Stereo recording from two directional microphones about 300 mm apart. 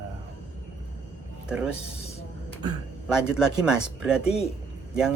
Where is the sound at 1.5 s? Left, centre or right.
Centre.